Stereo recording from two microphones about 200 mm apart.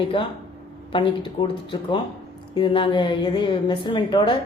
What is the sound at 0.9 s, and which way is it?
Speech, 25° left (ahead or behind).